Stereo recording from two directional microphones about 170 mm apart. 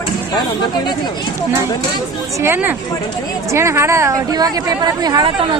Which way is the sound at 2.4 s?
10° right (ahead or behind).